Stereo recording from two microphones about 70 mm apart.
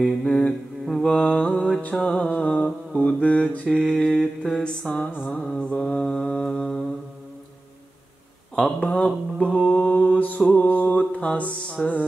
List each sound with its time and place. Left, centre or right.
0.2 s mantra: centre
1.8 s music: centre
3.0 s mantra: centre
3.8 s mantra: centre
8.7 s mantra: centre